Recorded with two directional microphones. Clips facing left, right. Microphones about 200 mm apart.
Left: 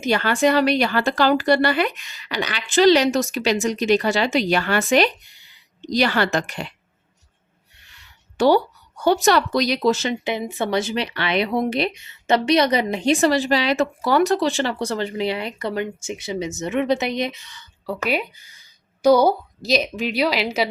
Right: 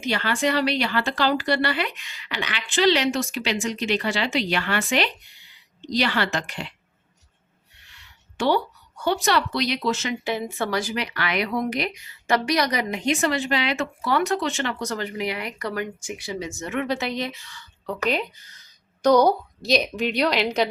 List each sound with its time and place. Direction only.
0.0 s speech: 45° left (ahead or behind)
8.4 s speech: 40° left (ahead or behind)
10.2 s speech: 20° left (ahead or behind)
17.8 s a woman's voice: 10° left (ahead or behind)